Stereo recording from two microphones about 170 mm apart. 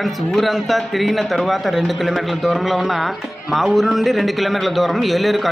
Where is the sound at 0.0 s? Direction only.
Centre (ahead or behind).